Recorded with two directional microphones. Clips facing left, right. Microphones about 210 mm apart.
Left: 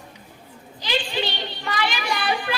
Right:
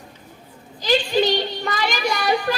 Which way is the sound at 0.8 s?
40° right (ahead or behind).